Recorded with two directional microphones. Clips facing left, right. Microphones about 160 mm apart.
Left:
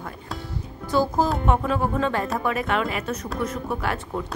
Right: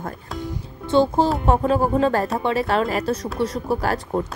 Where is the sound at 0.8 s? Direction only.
25° right (ahead or behind).